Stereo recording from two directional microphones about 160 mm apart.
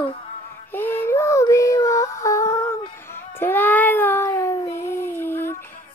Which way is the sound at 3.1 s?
15° left (ahead or behind).